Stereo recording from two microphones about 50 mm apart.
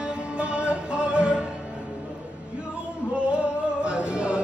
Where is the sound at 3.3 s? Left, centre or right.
Right.